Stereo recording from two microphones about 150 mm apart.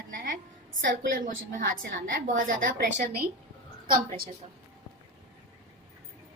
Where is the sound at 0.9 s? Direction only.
65° right (ahead or behind).